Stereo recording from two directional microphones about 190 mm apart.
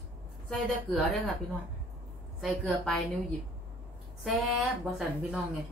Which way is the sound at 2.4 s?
Centre (ahead or behind).